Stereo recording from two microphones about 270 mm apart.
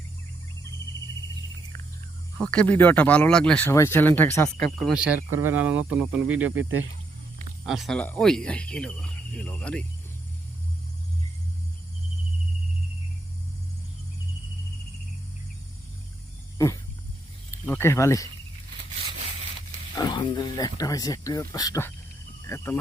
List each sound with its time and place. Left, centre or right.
2.4 s speech: centre
6.3 s speech: right
7.6 s speech: centre
17.5 s speech: centre
20.0 s speech: centre